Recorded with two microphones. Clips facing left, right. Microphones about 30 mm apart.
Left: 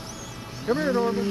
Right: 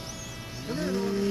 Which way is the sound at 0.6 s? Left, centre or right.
Centre.